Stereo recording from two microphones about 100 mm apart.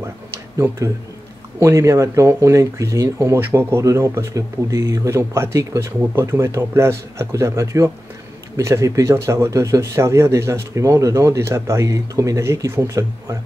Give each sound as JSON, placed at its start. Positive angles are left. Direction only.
{"t": 1.6, "sound": "speech", "side_deg": -30}